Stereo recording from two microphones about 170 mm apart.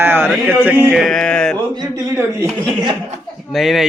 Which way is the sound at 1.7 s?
20° right (ahead or behind).